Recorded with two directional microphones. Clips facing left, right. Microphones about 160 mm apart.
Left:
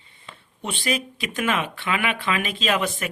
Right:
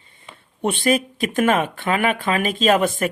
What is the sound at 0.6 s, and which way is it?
Speech, 55° right (ahead or behind).